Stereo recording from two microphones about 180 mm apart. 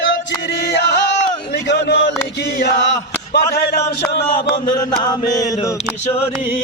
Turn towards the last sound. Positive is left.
turn(degrees=20)  # may be behind; listen again after turning